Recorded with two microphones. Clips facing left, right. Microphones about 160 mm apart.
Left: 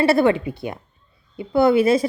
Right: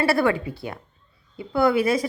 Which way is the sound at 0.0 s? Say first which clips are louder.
Left 4 dB; 25° left (ahead or behind).